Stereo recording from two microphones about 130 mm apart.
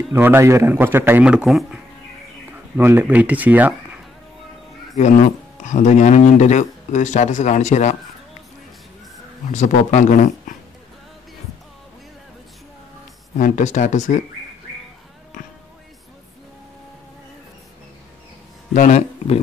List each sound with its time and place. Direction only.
0.1 s a man's voice: 15° right (ahead or behind)
2.8 s a man's voice: 15° right (ahead or behind)
4.9 s speech: 70° left (ahead or behind)
9.5 s speech: 65° left (ahead or behind)
13.4 s speech: 75° left (ahead or behind)
18.7 s speech: 70° left (ahead or behind)